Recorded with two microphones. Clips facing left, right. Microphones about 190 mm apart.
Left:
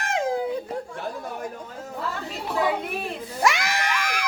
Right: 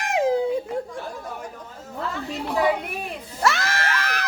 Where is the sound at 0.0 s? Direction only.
15° right (ahead or behind).